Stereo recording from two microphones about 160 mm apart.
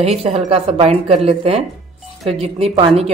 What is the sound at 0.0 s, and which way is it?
Speech, 40° right (ahead or behind).